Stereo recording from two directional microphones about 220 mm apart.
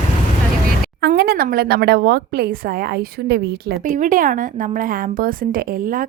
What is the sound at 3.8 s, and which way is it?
A woman's voice, 35° right (ahead or behind).